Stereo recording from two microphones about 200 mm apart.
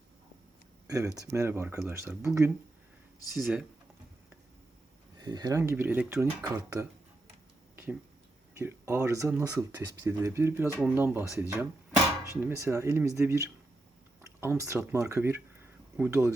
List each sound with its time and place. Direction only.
0.9 s speech: 15° right (ahead or behind)
3.3 s speech: centre (ahead or behind)
5.1 s speech: 20° right (ahead or behind)
8.5 s speech: 15° right (ahead or behind)